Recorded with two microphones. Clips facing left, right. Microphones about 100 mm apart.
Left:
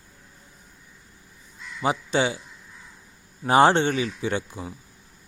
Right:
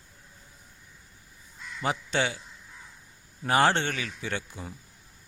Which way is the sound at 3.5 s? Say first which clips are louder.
Left 6 dB; 20° left (ahead or behind).